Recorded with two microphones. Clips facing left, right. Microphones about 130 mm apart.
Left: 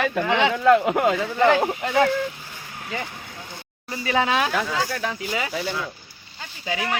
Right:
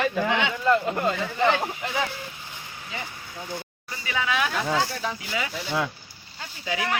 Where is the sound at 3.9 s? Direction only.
35° left (ahead or behind).